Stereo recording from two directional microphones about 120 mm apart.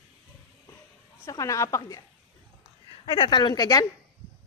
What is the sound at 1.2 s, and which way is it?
Speech, 25° left (ahead or behind).